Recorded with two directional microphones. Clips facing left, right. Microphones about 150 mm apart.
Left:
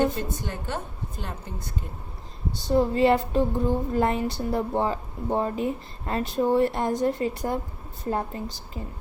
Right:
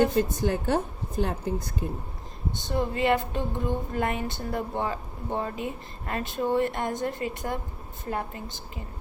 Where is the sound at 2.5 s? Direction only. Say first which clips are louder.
Left 6 dB; 35° left (ahead or behind).